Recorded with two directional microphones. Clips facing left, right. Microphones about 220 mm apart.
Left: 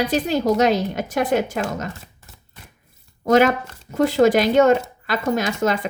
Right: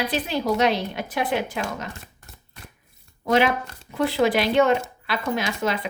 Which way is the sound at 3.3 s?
45° left (ahead or behind).